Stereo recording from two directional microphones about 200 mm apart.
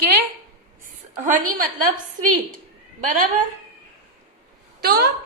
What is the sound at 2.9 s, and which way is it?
Speech, 40° right (ahead or behind).